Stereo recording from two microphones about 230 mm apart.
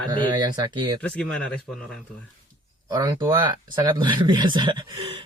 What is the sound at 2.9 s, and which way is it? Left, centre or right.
Speech, centre.